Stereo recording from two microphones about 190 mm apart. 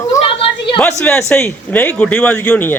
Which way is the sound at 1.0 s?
5° left (ahead or behind).